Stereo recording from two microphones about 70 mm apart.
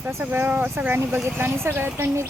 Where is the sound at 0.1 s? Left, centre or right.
Right.